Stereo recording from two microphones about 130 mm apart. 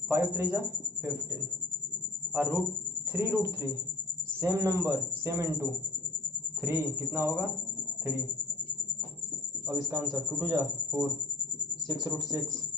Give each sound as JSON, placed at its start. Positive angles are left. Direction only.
{"t": 0.1, "sound": "speech", "side_deg": -20}
{"t": 2.3, "sound": "speech", "side_deg": -15}
{"t": 9.6, "sound": "speech", "side_deg": -25}